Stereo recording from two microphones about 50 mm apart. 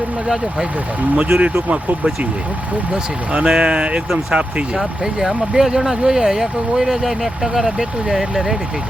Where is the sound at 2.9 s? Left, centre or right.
Centre.